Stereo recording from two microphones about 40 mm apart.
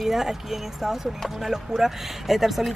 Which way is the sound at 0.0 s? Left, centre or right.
Centre.